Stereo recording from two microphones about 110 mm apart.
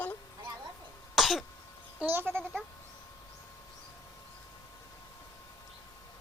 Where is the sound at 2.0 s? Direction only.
20° right (ahead or behind).